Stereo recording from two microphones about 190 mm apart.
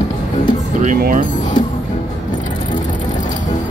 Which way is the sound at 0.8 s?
45° right (ahead or behind).